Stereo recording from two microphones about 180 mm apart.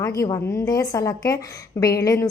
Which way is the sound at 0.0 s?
20° left (ahead or behind).